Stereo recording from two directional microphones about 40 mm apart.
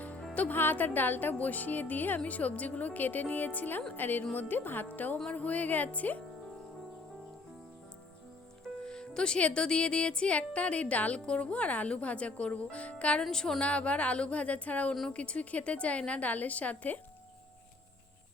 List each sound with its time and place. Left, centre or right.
0.5 s a child's voice: left
8.8 s music: centre
9.4 s a child's voice: left